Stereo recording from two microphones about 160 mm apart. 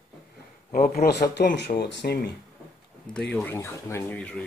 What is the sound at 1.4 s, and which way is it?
Speech, 90° left.